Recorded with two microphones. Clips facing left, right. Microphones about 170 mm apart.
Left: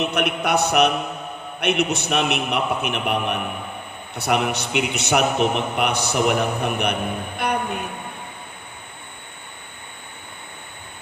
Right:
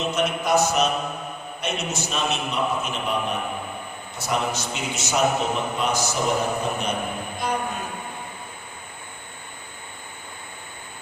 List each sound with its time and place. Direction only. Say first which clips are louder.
0.0 s a man's voice: left 2 dB; 65° left (ahead or behind)
7.3 s music: left 3 dB; 65° left (ahead or behind)